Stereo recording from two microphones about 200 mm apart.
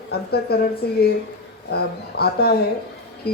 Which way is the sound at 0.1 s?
50° left (ahead or behind).